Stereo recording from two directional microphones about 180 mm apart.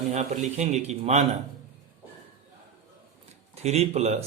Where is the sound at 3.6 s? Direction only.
35° right (ahead or behind).